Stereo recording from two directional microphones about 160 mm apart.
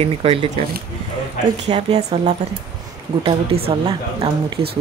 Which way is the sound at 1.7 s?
45° right (ahead or behind).